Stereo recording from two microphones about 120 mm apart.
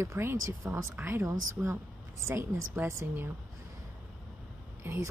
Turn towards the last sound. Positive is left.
turn(degrees=-25)  # may be behind; listen again after turning